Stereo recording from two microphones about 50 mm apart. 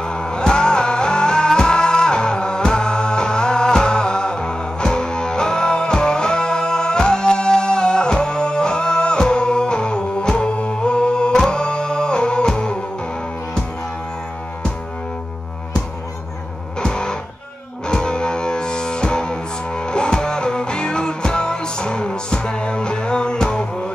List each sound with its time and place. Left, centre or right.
0.0 s music: centre
16.8 s music: centre